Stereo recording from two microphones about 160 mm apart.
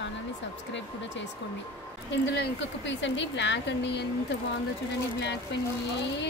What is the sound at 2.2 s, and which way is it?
Speech, 90° left.